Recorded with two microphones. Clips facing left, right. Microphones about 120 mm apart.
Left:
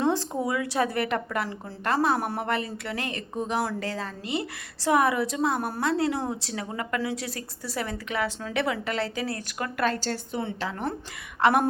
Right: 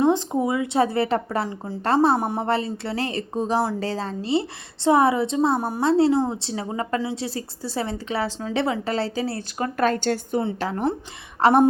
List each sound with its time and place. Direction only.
0.0 s speech: 20° right (ahead or behind)
1.5 s a woman's voice: 20° right (ahead or behind)
1.8 s a woman's voice: 30° right (ahead or behind)
2.1 s a woman's voice: 20° right (ahead or behind)
2.5 s a woman's voice: 30° right (ahead or behind)
5.5 s a woman's voice: 15° right (ahead or behind)
5.8 s a woman's voice: 25° right (ahead or behind)
9.7 s a woman's voice: 45° right (ahead or behind)